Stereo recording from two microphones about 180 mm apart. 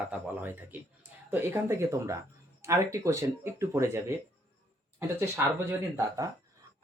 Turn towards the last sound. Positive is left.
turn(degrees=-15)  # may be behind; listen again after turning